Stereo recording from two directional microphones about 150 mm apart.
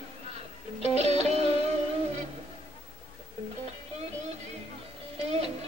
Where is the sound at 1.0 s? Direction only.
45° right (ahead or behind).